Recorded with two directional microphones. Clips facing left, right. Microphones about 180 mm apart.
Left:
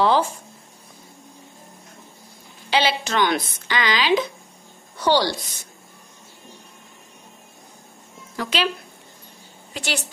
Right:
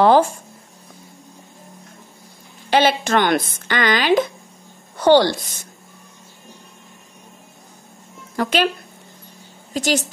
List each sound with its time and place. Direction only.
0.0 s a sound: 50° right (ahead or behind)
2.7 s a woman's voice: 50° right (ahead or behind)
8.4 s speech: 50° right (ahead or behind)
9.8 s speech: 40° right (ahead or behind)